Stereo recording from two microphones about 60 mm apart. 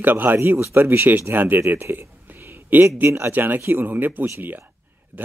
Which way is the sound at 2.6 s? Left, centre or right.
Right.